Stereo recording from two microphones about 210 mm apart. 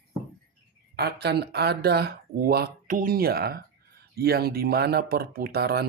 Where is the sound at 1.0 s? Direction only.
50° right (ahead or behind).